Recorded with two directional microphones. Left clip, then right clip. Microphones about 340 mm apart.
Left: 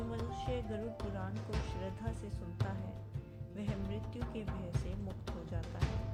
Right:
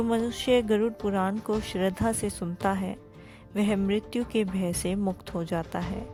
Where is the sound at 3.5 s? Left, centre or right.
Right.